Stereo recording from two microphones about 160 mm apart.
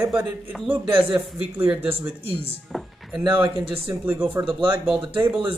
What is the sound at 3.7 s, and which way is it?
Speech, 10° right (ahead or behind).